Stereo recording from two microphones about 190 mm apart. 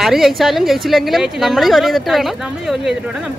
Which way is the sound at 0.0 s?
Centre (ahead or behind).